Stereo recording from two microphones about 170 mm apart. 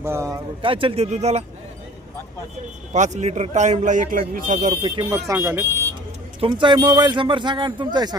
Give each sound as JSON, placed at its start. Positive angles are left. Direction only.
{"t": 0.0, "sound": "speech", "side_deg": -15}
{"t": 0.6, "sound": "speech", "side_deg": -30}
{"t": 2.9, "sound": "speech", "side_deg": -45}
{"t": 4.7, "sound": "speech", "side_deg": -25}
{"t": 6.4, "sound": "speech", "side_deg": -30}